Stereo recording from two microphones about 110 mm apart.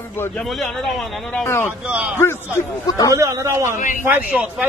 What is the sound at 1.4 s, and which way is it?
A man's voice, 20° left (ahead or behind).